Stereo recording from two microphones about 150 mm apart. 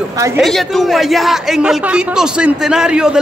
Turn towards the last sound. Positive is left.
turn(degrees=-5)  # may be behind; listen again after turning